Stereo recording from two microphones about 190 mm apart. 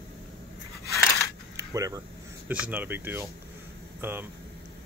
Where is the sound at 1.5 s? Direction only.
15° right (ahead or behind).